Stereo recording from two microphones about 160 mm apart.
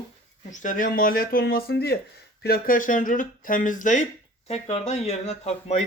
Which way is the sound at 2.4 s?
65° left (ahead or behind).